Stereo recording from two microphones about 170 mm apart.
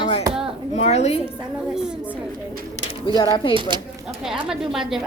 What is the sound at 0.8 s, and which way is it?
Speech, 40° left (ahead or behind).